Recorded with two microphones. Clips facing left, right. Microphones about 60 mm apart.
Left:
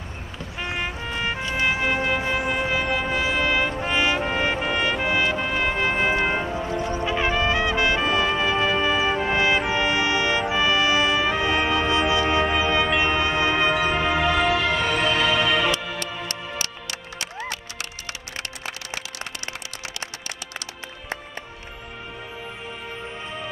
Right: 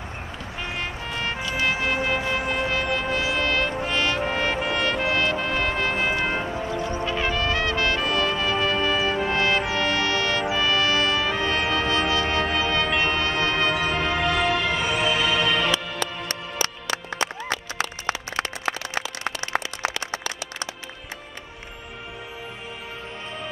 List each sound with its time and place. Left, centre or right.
0.6 s music: centre
1.4 s vehicle: left
3.8 s music: centre
6.7 s music: left
7.1 s brass instrument: centre
10.5 s music: centre
17.7 s music: right